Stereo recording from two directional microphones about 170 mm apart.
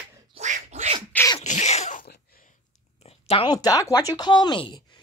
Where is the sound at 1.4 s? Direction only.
40° left (ahead or behind).